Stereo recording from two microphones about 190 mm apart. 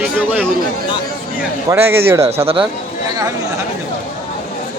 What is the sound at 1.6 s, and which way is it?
Speech, 10° right (ahead or behind).